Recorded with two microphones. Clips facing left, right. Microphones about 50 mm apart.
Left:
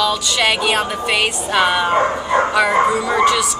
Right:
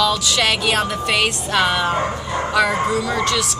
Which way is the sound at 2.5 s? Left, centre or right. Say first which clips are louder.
Right 1 dB; centre.